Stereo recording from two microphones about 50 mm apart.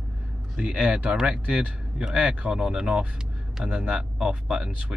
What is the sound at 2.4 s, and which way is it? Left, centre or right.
Speech, centre.